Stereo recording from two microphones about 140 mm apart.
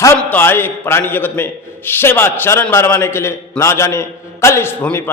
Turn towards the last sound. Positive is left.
turn(degrees=15)  # may be behind; listen again after turning